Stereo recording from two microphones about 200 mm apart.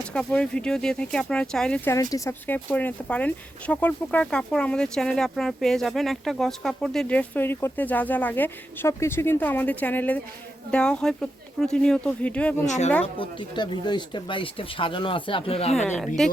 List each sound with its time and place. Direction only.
0.1 s speech: 5° left (ahead or behind)
12.6 s speech: 35° left (ahead or behind)
13.1 s speech: 20° left (ahead or behind)
16.2 s speech: centre (ahead or behind)